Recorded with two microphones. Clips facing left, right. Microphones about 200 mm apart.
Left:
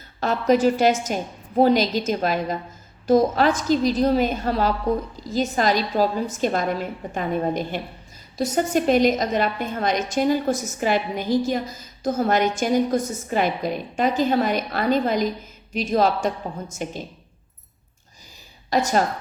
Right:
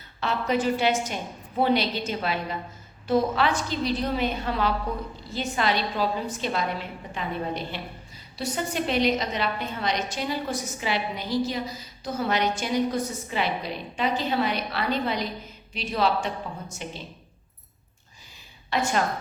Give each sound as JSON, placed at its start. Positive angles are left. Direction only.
{"t": 0.2, "sound": "a woman's voice", "side_deg": 45}
{"t": 18.7, "sound": "a woman's voice", "side_deg": 40}